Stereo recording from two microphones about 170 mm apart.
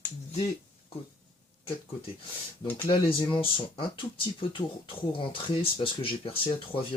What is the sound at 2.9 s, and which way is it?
Speech, 30° left (ahead or behind).